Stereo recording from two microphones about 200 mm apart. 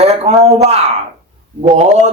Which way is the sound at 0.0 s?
30° right (ahead or behind).